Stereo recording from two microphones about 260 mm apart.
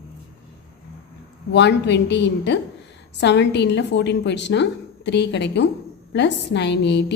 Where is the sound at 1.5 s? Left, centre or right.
Left.